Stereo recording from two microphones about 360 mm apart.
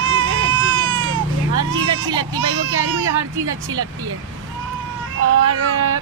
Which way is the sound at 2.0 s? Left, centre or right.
Centre.